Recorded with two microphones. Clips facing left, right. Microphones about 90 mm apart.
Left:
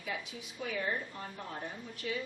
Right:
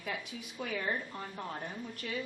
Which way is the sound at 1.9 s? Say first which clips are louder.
Left 4 dB; 50° right (ahead or behind).